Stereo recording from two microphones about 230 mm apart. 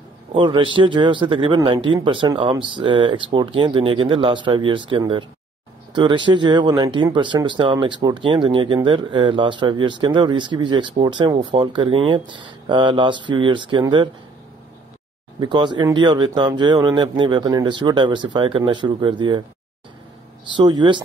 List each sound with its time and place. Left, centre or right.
0.3 s a man's voice: right
15.4 s speech: centre
20.5 s speech: centre